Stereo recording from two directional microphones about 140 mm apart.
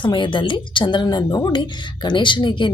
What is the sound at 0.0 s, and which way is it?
A woman's voice, 35° left (ahead or behind).